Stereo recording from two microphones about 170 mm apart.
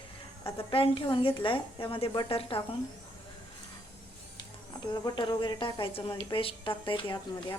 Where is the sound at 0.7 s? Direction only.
30° left (ahead or behind).